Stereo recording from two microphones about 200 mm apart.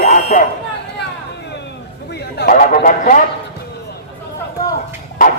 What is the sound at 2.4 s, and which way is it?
Speech, 45° left (ahead or behind).